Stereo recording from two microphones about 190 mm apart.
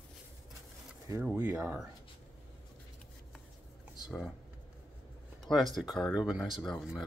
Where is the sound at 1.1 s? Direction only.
15° right (ahead or behind).